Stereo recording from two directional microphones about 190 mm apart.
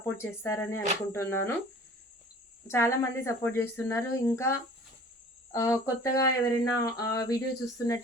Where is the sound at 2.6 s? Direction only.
15° left (ahead or behind).